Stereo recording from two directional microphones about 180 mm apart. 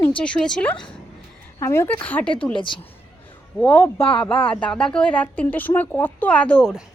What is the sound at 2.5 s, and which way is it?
Speech, 25° left (ahead or behind).